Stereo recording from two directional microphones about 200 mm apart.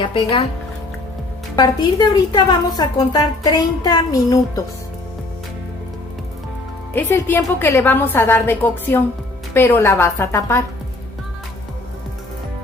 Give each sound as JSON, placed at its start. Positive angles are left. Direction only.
{"t": 0.0, "sound": "a woman's voice", "side_deg": 25}
{"t": 1.5, "sound": "a woman's voice", "side_deg": 20}
{"t": 6.9, "sound": "a woman's voice", "side_deg": 10}